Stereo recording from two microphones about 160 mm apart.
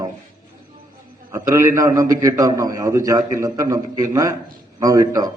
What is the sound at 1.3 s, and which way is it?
A man's voice, 20° right (ahead or behind).